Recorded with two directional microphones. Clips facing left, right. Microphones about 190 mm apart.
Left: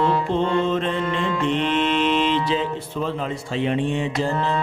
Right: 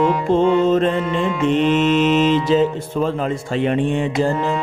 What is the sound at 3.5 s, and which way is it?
Mantra, 55° right (ahead or behind).